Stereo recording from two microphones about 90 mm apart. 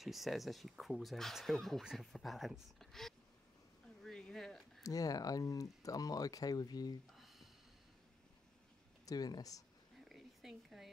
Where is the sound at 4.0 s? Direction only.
5° left (ahead or behind).